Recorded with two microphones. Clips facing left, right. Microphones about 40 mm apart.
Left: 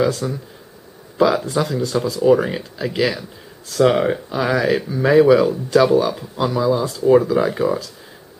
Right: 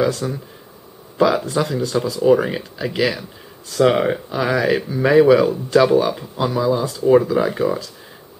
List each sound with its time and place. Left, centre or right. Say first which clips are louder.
0.0 s speech: even; centre